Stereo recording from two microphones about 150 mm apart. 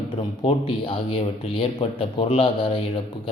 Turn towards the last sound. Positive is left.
turn(degrees=35)  # may be behind; listen again after turning